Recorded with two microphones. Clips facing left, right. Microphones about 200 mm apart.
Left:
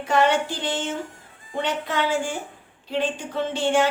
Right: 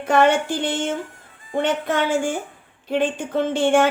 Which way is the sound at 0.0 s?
50° right (ahead or behind).